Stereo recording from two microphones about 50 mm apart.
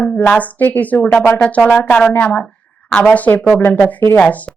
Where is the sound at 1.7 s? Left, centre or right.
Left.